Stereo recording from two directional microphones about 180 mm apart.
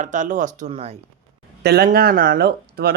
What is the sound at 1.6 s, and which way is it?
Speech, 60° right (ahead or behind).